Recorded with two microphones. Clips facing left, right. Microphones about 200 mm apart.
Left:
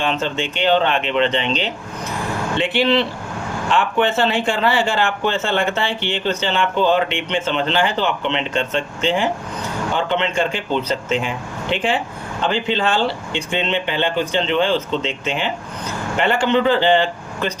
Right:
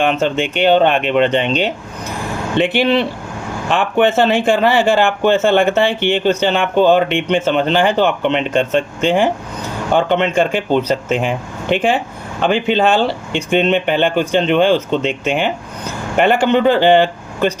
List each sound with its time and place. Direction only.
0.0 s speech: 55° right (ahead or behind)
13.3 s speech: 50° right (ahead or behind)